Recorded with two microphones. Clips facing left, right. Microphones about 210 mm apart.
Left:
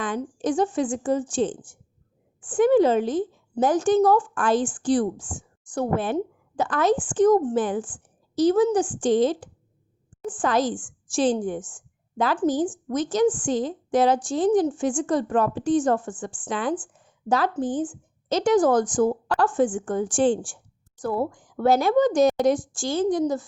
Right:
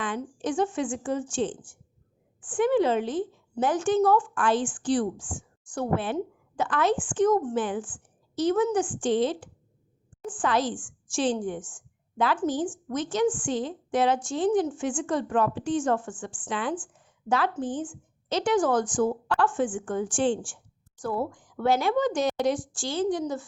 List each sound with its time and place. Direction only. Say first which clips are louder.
0.0 s a woman's voice: left 4 dB; 40° left (ahead or behind)